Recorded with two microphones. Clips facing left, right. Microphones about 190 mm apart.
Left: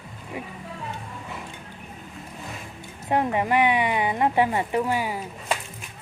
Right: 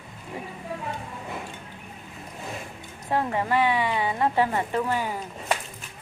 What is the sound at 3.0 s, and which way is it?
Speech, 20° left (ahead or behind).